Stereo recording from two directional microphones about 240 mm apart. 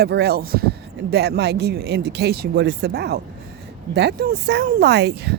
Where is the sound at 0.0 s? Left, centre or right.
Right.